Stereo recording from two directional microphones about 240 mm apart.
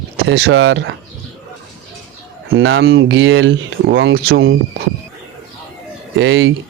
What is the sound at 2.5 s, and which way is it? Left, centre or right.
Speech, right.